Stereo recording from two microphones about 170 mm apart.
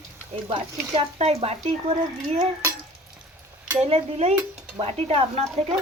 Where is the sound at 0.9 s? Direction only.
35° right (ahead or behind).